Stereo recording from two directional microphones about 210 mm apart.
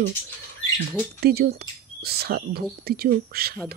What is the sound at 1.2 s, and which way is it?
Speech, 50° right (ahead or behind).